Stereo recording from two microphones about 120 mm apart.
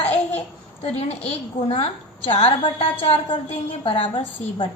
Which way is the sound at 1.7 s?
55° left (ahead or behind).